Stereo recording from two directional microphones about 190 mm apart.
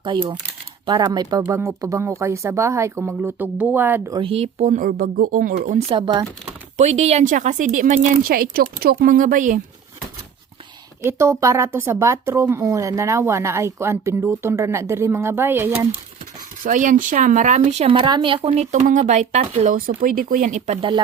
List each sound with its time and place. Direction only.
0.0 s speech: 25° right (ahead or behind)
4.2 s speech: 30° right (ahead or behind)
6.0 s speech: 25° right (ahead or behind)
6.7 s speech: 35° right (ahead or behind)
11.0 s speech: 15° right (ahead or behind)
16.6 s speech: 40° right (ahead or behind)